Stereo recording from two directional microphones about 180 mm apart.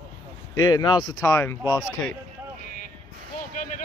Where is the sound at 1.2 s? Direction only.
15° left (ahead or behind).